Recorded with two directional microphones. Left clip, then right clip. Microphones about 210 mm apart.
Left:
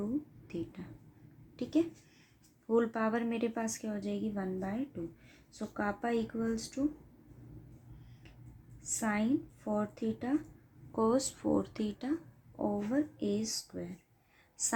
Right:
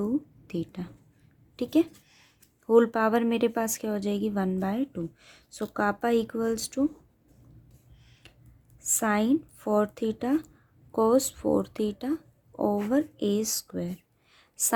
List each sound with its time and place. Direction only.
0.4 s a woman's voice: 45° right (ahead or behind)
8.8 s a woman's voice: 45° right (ahead or behind)